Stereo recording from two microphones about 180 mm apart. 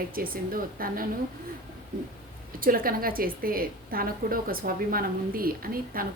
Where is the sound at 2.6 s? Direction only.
50° right (ahead or behind).